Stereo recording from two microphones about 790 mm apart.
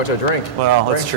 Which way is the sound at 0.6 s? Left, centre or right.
Right.